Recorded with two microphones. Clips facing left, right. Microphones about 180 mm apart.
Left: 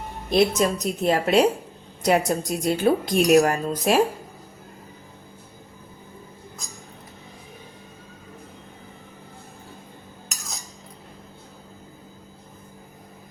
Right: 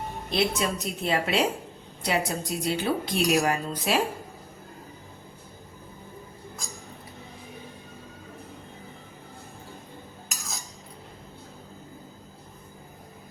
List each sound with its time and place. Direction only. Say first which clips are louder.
0.3 s a woman's voice: left 7 dB; 45° left (ahead or behind)